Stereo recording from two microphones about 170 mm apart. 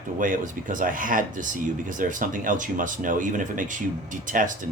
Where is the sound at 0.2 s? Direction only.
50° right (ahead or behind).